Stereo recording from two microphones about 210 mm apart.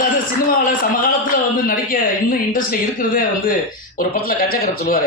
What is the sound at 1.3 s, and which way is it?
A man's voice, 40° left (ahead or behind).